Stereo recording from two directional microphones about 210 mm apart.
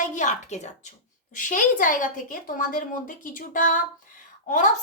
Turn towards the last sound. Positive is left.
turn(degrees=35)  # may be behind; listen again after turning